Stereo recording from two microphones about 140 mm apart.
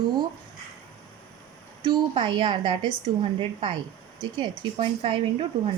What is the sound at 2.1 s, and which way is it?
A woman's voice, 35° right (ahead or behind).